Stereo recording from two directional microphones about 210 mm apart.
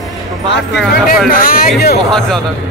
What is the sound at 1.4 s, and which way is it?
Speech, 45° left (ahead or behind).